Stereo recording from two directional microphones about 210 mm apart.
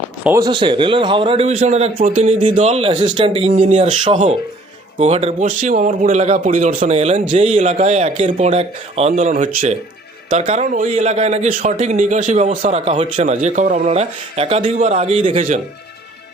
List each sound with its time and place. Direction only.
0.3 s a man's voice: 15° right (ahead or behind); by 3.8 s 35° right (ahead or behind)
3.8 s a man's voice: 25° right (ahead or behind)